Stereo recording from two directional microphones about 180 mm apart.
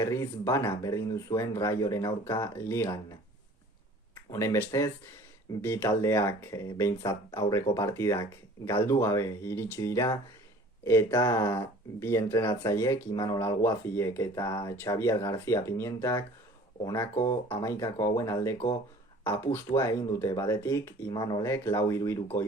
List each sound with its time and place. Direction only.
0.0 s speech: 15° left (ahead or behind)
4.1 s speech: 15° left (ahead or behind)
18.5 s speech: 30° left (ahead or behind)
19.2 s speech: 15° left (ahead or behind)